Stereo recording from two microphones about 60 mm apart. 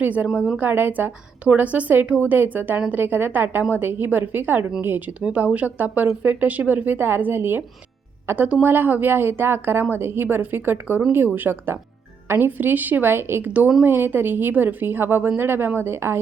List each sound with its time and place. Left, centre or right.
0.0 s a woman's voice: right
13.4 s a woman's voice: right